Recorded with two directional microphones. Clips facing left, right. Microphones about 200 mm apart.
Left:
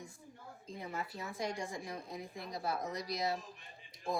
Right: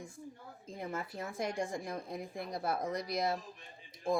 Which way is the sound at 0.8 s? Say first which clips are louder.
Right 3 dB; 50° right (ahead or behind).